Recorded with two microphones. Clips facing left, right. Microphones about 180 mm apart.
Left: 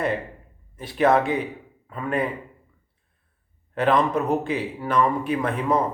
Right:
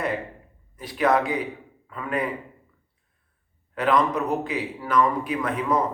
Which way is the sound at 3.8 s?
25° left (ahead or behind).